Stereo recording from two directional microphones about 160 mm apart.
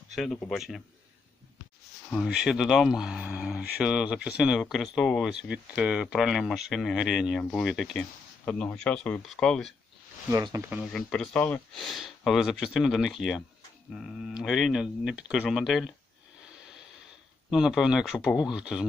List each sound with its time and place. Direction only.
0.1 s speech: centre (ahead or behind)
2.0 s speech: 5° right (ahead or behind)
10.2 s speech: 20° right (ahead or behind)
10.7 s speech: 5° right (ahead or behind)
11.1 s speech: 5° left (ahead or behind)
17.5 s speech: 5° right (ahead or behind)